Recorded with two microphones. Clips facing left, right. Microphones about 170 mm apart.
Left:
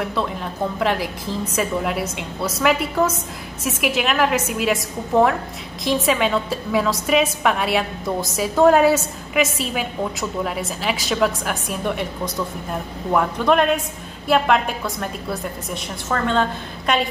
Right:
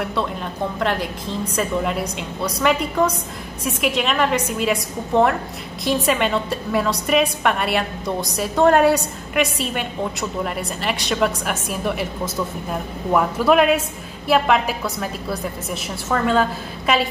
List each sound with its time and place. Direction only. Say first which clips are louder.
0.0 s a woman's voice: even; centre (ahead or behind)